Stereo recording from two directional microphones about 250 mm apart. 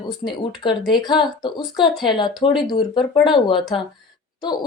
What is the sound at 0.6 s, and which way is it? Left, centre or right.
A woman's voice, centre.